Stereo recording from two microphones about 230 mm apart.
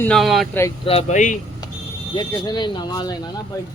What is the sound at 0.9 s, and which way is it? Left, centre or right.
Speech, left.